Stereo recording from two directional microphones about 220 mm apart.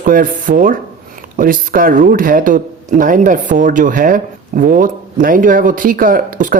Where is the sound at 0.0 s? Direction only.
40° right (ahead or behind).